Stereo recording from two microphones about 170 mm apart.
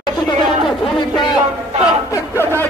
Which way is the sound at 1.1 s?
25° left (ahead or behind).